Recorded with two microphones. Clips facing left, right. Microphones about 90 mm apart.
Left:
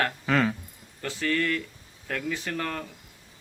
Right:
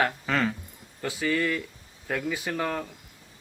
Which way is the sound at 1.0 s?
10° right (ahead or behind).